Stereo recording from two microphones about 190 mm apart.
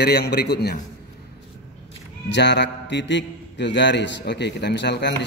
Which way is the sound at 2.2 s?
65° left (ahead or behind).